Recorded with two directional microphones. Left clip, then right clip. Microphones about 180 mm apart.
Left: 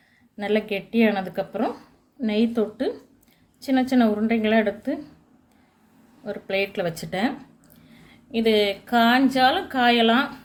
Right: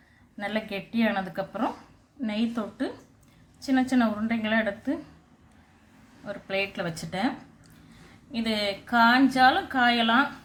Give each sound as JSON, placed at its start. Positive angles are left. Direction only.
{"t": 0.3, "sound": "a woman's voice", "side_deg": 35}
{"t": 6.2, "sound": "a woman's voice", "side_deg": 35}